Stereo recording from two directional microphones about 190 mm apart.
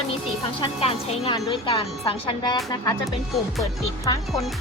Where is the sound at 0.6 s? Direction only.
30° left (ahead or behind).